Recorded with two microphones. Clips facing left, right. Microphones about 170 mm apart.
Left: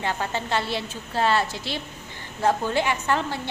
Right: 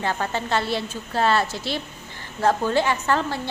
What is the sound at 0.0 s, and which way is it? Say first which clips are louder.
A woman's voice: right 2 dB; 15° left (ahead or behind).